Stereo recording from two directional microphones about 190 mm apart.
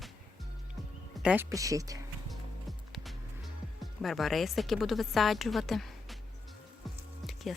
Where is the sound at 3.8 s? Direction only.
Centre (ahead or behind).